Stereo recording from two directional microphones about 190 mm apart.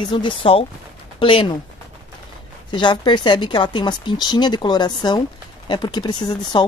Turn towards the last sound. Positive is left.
turn(degrees=25)  # may be behind; listen again after turning